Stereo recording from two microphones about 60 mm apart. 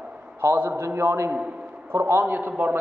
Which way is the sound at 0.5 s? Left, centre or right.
Right.